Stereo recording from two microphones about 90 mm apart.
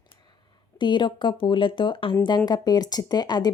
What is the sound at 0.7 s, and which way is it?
Speech, 60° left (ahead or behind).